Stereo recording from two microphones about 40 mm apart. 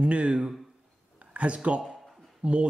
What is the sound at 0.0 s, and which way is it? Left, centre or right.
Speech, right.